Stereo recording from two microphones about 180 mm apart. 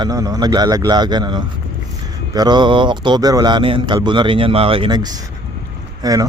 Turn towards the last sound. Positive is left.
turn(degrees=-20)  # may be behind; listen again after turning